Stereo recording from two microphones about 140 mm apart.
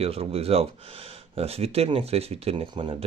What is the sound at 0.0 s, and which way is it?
Speech, 45° right (ahead or behind).